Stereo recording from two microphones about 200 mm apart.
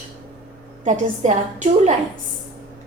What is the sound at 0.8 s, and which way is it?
A woman's voice, 35° right (ahead or behind).